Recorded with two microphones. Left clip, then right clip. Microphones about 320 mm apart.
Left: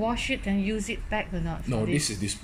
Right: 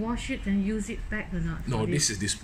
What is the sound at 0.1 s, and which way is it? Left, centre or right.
Speech, centre.